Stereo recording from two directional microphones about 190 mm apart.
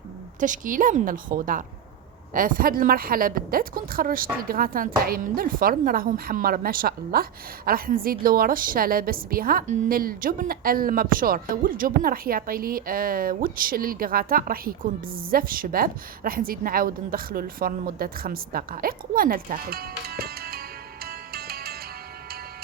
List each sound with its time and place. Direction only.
0.3 s a woman's voice: 40° right (ahead or behind)